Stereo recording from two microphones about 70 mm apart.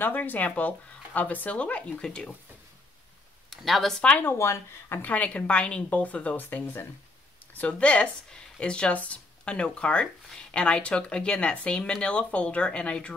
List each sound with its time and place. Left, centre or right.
0.0 s speech: left
2.0 s speech: centre
3.4 s speech: centre
4.2 s speech: left
5.0 s speech: centre